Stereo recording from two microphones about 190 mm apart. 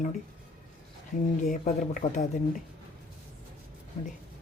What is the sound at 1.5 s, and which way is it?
Speech, 40° left (ahead or behind).